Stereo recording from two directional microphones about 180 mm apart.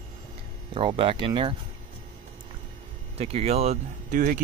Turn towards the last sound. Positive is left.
turn(degrees=-45)  # may be behind; listen again after turning